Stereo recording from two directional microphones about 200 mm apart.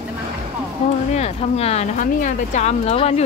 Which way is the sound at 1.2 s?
30° left (ahead or behind).